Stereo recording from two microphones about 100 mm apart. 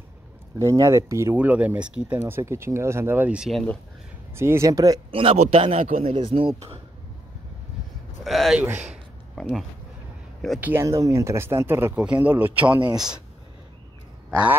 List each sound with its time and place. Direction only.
0.6 s speech: 30° right (ahead or behind)
1.3 s speech: 15° right (ahead or behind)
2.1 s speech: 25° right (ahead or behind)
4.4 s speech: 30° right (ahead or behind)
5.1 s a man's voice: 70° right (ahead or behind)
6.2 s speech: 65° right (ahead or behind)
8.2 s speech: centre (ahead or behind)
8.5 s speech: 15° right (ahead or behind)
9.3 s speech: 5° left (ahead or behind)
10.6 s speech: 25° right (ahead or behind)
12.9 s speech: 5° right (ahead or behind)